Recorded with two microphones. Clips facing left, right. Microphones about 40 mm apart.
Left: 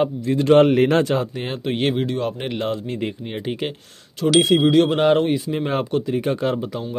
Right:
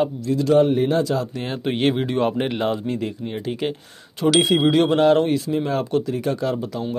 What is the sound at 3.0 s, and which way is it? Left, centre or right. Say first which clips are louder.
Mantra: even; left.